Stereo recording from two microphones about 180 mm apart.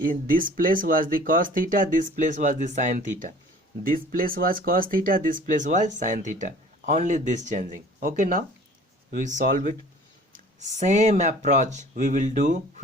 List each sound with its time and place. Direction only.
0.0 s speech: 50° right (ahead or behind)